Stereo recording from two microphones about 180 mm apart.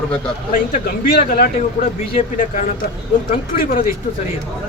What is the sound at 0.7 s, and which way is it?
A man's voice, 50° left (ahead or behind).